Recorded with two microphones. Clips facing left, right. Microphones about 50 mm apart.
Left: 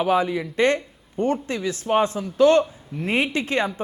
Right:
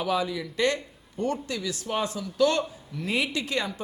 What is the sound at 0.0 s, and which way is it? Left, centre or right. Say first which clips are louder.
Speech: left 6 dB; left.